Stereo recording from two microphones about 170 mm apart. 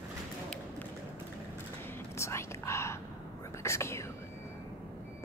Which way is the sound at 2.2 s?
15° left (ahead or behind).